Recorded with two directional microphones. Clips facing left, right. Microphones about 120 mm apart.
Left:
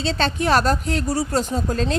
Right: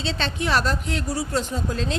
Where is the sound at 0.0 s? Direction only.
40° left (ahead or behind).